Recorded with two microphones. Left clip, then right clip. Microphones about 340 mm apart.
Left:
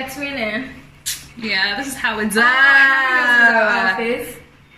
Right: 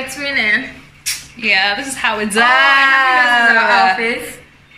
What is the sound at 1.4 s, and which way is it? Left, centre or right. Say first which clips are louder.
Speech: right 6 dB; right.